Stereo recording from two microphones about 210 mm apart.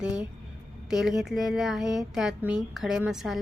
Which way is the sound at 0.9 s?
Centre (ahead or behind).